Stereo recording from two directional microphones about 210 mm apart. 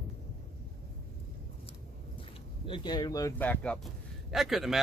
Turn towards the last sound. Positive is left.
turn(degrees=0)  # may be behind; listen again after turning